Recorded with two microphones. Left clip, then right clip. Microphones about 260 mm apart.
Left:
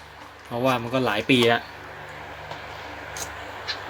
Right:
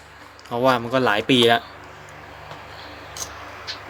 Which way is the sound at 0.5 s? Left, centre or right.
Right.